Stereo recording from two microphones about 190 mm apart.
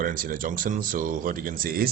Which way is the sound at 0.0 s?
45° right (ahead or behind).